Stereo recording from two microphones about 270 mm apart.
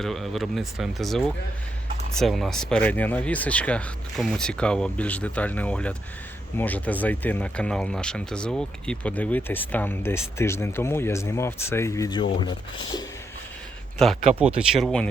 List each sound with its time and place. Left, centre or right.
0.0 s speech: centre
14.0 s speech: centre